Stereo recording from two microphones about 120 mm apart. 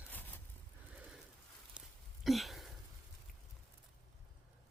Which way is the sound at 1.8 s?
10° right (ahead or behind).